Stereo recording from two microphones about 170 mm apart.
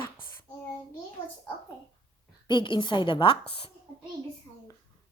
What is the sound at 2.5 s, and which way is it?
Speech, 30° left (ahead or behind).